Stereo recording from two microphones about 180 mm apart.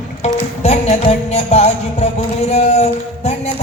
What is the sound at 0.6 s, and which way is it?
Music, 35° left (ahead or behind).